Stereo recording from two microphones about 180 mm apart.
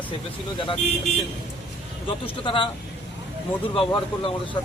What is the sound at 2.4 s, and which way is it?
Speech, 30° left (ahead or behind).